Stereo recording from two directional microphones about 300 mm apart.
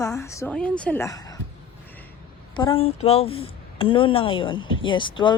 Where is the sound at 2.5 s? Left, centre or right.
Centre.